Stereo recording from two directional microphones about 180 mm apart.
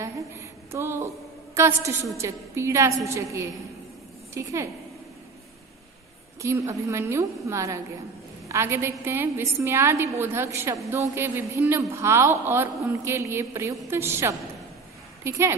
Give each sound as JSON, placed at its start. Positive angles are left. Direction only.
{"t": 0.7, "sound": "a woman's voice", "side_deg": -15}
{"t": 6.4, "sound": "a woman's voice", "side_deg": -15}